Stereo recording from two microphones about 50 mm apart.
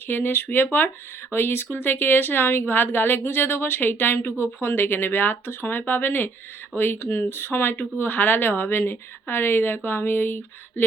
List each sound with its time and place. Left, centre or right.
0.1 s speech: left